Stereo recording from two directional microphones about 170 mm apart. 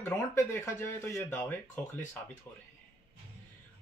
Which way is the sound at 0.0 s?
15° left (ahead or behind).